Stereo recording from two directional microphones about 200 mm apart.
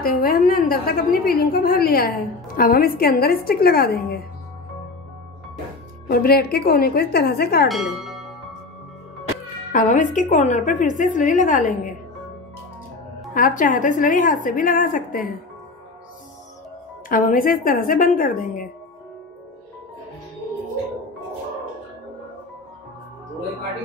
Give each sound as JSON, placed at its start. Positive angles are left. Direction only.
{"t": 0.0, "sound": "a woman's voice", "side_deg": 45}
{"t": 6.0, "sound": "a woman's voice", "side_deg": 50}
{"t": 7.6, "sound": "music", "side_deg": 0}
{"t": 9.7, "sound": "a woman's voice", "side_deg": 40}
{"t": 13.3, "sound": "a woman's voice", "side_deg": 40}
{"t": 17.1, "sound": "a woman's voice", "side_deg": 45}